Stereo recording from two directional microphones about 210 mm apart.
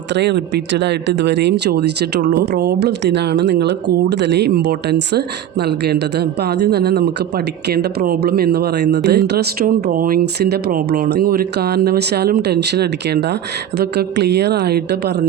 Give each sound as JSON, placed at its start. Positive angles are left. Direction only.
{"t": 0.1, "sound": "speech", "side_deg": -55}